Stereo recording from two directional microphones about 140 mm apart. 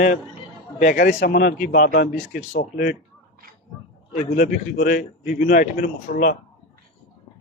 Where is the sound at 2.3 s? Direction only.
75° left (ahead or behind).